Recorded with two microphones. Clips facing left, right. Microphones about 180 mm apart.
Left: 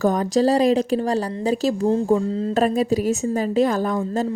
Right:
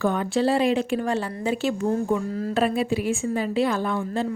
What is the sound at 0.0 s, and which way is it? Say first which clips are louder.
A woman's voice: left 4 dB; 40° left (ahead or behind).